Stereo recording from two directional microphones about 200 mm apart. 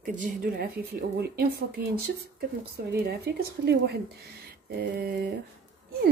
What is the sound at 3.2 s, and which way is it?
Speech, 55° right (ahead or behind).